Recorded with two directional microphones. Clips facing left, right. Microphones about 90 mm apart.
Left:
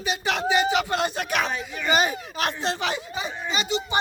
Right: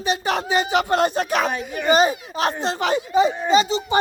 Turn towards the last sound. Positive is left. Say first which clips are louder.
# right 9 dB
turn(degrees=-30)  # may be behind; listen again after turning